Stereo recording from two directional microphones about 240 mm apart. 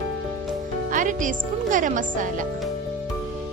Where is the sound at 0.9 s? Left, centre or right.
Right.